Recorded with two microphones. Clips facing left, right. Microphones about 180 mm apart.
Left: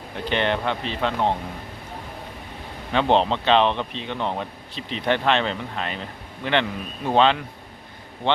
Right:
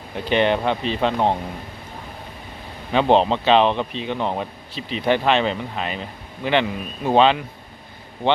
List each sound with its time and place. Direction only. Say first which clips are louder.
0.3 s a man's voice: right 4 dB; 15° right (ahead or behind)
2.9 s a man's voice: right 3 dB; 10° right (ahead or behind)